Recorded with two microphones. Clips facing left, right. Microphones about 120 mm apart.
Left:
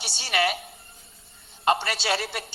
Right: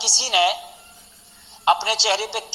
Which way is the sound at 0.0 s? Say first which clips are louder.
Right 5 dB; 90° right.